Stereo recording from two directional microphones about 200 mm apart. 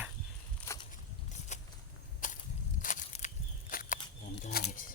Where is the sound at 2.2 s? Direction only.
40° left (ahead or behind).